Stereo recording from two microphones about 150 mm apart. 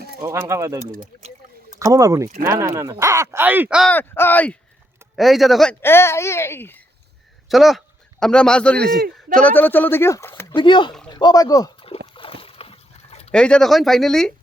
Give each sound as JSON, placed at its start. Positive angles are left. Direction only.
{"t": 0.2, "sound": "speech", "side_deg": -20}
{"t": 0.9, "sound": "speech", "side_deg": -60}
{"t": 1.8, "sound": "speech", "side_deg": -20}
{"t": 3.8, "sound": "speech", "side_deg": 15}
{"t": 5.1, "sound": "speech", "side_deg": 0}
{"t": 5.8, "sound": "speech", "side_deg": 15}
{"t": 7.4, "sound": "speech", "side_deg": 0}
{"t": 10.5, "sound": "speech", "side_deg": 30}
{"t": 12.1, "sound": "a sound", "side_deg": 35}
{"t": 13.3, "sound": "speech", "side_deg": 5}